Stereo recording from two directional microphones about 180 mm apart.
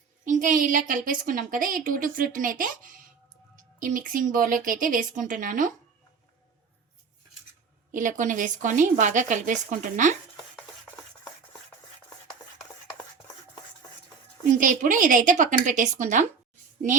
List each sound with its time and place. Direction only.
0.3 s a woman's voice: 45° right (ahead or behind)
7.9 s a woman's voice: 45° right (ahead or behind)
10.8 s rub: 10° left (ahead or behind)
14.5 s a woman's voice: 45° right (ahead or behind)